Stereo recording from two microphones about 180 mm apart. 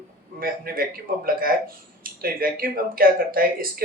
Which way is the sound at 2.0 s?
55° right (ahead or behind).